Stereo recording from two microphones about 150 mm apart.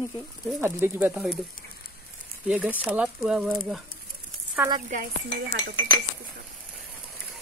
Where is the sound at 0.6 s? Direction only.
15° right (ahead or behind).